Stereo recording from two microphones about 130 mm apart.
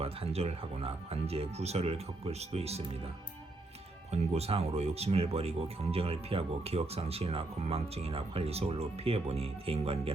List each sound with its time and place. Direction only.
0.0 s speech: 50° right (ahead or behind)
4.1 s speech: 55° right (ahead or behind)